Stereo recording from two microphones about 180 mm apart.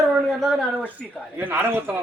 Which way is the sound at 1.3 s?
10° right (ahead or behind).